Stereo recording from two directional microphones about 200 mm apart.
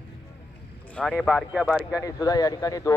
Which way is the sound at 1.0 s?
Centre (ahead or behind).